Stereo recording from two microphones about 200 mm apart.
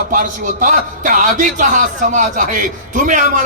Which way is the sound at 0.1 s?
40° right (ahead or behind).